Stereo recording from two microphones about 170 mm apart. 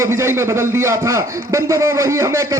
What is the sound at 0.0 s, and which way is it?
A man's voice, 15° right (ahead or behind).